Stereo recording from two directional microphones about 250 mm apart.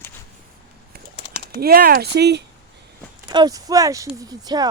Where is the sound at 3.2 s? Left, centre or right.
Centre.